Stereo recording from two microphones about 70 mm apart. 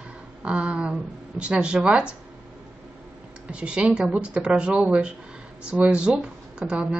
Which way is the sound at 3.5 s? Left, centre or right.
Centre.